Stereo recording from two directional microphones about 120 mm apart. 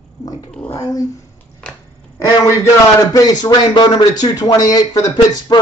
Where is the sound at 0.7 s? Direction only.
30° left (ahead or behind).